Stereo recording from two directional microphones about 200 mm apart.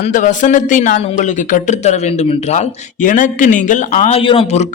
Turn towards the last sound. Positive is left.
turn(degrees=30)  # may be behind; listen again after turning